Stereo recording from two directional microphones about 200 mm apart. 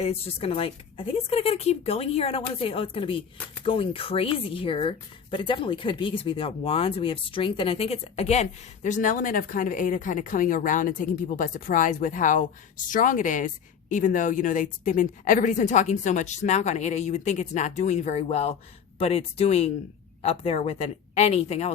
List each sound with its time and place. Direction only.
0.0 s speech: 30° left (ahead or behind)